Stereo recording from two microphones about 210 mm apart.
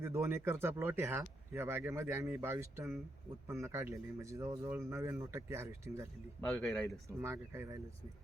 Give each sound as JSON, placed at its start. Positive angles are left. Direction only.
{"t": 0.0, "sound": "speech", "side_deg": -10}
{"t": 6.4, "sound": "speech", "side_deg": 0}
{"t": 7.2, "sound": "speech", "side_deg": -10}